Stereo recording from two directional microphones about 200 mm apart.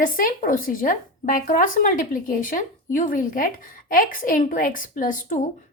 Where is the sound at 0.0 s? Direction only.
45° left (ahead or behind).